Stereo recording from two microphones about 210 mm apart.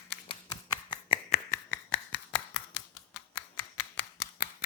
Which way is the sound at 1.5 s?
45° left (ahead or behind).